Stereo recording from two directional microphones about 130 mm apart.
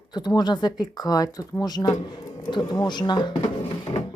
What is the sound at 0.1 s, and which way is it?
Speech, 35° left (ahead or behind).